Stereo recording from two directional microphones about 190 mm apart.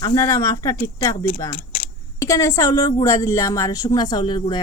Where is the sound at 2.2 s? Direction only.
15° left (ahead or behind).